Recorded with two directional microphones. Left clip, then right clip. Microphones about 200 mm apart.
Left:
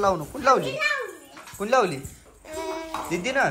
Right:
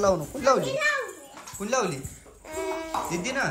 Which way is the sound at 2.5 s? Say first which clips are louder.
Right 1 dB; centre (ahead or behind).